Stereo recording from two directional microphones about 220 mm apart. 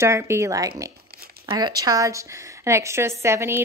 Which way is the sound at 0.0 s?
10° right (ahead or behind).